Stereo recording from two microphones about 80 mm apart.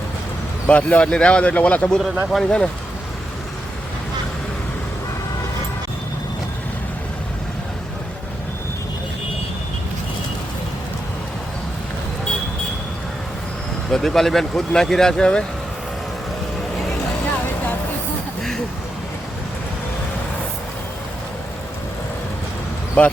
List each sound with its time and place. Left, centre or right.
0.7 s a man's voice: centre
13.9 s speech: centre
23.0 s a man's voice: centre